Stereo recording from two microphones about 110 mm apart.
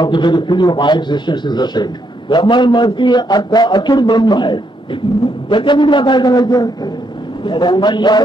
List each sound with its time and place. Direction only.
0.0 s a man's voice: 45° left (ahead or behind)